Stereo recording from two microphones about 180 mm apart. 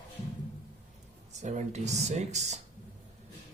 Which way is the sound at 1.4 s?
40° right (ahead or behind).